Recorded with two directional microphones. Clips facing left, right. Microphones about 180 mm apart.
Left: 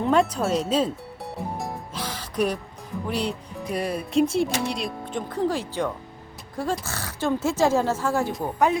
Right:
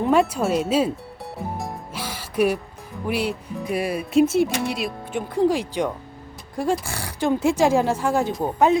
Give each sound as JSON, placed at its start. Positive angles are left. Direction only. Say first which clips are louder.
{"t": 0.0, "sound": "music", "louder": "right 2 dB", "side_deg": -5}
{"t": 3.1, "sound": "speech", "louder": "right 4 dB", "side_deg": -5}